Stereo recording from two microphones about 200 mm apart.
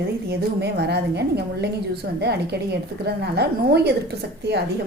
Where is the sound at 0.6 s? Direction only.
55° right (ahead or behind).